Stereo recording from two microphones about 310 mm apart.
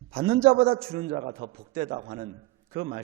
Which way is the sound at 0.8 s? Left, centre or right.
Centre.